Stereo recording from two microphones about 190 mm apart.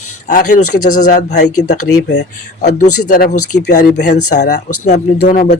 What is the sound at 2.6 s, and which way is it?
Speech, 40° left (ahead or behind).